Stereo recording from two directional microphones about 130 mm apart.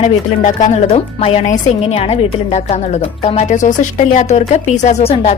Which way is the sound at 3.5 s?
70° left (ahead or behind).